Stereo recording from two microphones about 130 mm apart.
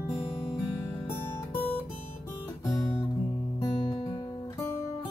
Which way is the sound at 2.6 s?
15° left (ahead or behind).